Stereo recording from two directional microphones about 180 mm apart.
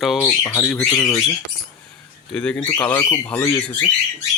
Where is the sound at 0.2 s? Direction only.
10° left (ahead or behind).